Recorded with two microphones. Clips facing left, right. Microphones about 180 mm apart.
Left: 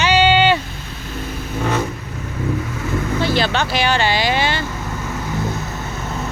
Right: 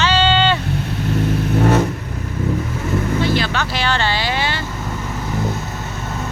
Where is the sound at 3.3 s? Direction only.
30° left (ahead or behind).